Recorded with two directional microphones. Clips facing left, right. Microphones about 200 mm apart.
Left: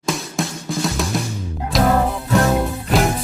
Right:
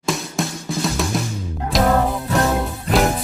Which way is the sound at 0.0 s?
Centre (ahead or behind).